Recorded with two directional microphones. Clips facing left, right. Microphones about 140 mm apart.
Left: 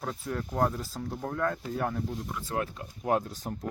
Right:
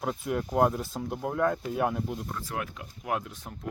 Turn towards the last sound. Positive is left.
turn(degrees=35)  # may be behind; listen again after turning